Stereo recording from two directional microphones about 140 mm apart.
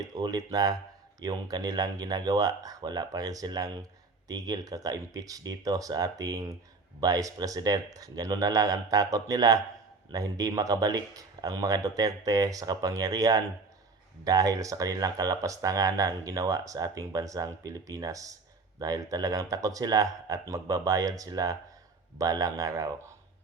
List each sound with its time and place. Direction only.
0.2 s speech: 30° right (ahead or behind)